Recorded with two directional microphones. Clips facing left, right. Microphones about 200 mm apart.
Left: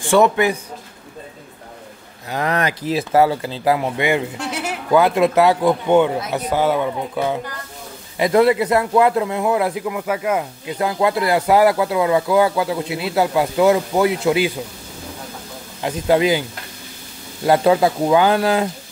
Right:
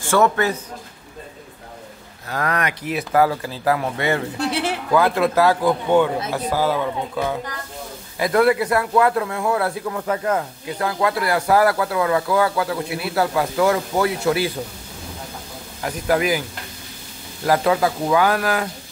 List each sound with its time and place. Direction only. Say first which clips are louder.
0.0 s a man's voice: left 3 dB; 15° left (ahead or behind)
2.2 s speech: left 3 dB; 20° left (ahead or behind)
4.4 s a sound: right 3 dB; 30° right (ahead or behind)
4.9 s speech: left 3 dB; 20° left (ahead or behind)
15.8 s speech: left 4 dB; 25° left (ahead or behind)
17.5 s speech: left 4 dB; 25° left (ahead or behind)